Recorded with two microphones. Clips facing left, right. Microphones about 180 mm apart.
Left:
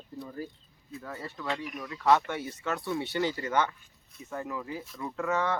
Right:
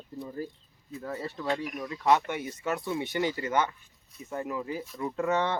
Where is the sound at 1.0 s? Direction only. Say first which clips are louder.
Right 4 dB; 25° right (ahead or behind).